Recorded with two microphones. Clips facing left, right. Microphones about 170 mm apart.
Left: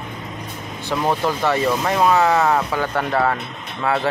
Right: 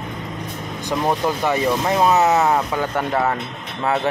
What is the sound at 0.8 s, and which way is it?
Speech, 15° right (ahead or behind).